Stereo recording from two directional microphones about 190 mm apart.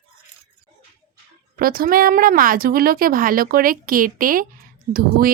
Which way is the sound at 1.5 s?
50° right (ahead or behind).